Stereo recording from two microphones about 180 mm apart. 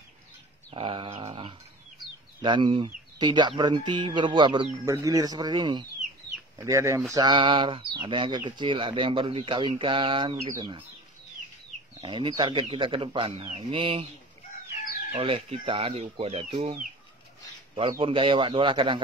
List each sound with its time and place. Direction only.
0.7 s a sound: 30° right (ahead or behind)
2.4 s speech: 25° right (ahead or behind)
12.0 s speech: 25° right (ahead or behind)
15.1 s speech: 30° right (ahead or behind)
17.7 s speech: 30° right (ahead or behind)